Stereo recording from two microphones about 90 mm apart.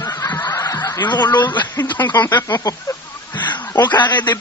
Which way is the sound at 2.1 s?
50° left (ahead or behind).